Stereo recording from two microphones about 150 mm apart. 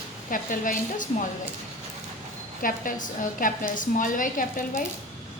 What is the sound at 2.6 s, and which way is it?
A woman's voice, 60° left (ahead or behind).